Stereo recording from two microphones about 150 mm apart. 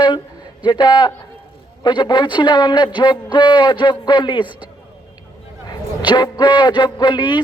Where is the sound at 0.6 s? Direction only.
30° left (ahead or behind).